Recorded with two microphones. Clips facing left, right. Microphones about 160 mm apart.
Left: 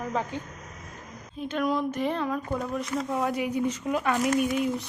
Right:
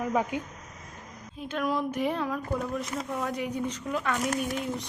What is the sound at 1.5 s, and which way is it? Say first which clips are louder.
Speech: left 2 dB; 5° right (ahead or behind).